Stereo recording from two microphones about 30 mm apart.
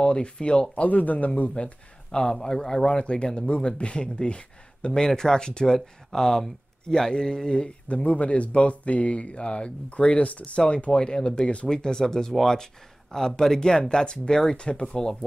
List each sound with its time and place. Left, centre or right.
0.0 s speech: left
0.8 s speech: left
2.0 s speech: left
5.8 s speech: centre
7.9 s speech: left
10.9 s speech: left
13.6 s speech: left